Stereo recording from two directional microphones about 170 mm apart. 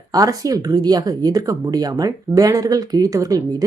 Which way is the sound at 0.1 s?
20° right (ahead or behind).